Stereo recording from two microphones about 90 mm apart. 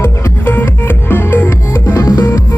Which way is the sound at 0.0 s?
25° left (ahead or behind).